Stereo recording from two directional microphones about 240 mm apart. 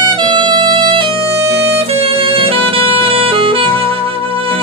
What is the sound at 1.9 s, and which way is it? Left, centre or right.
Music, right.